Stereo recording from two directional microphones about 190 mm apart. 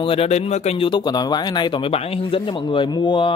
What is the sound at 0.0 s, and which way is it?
Speech, 30° left (ahead or behind).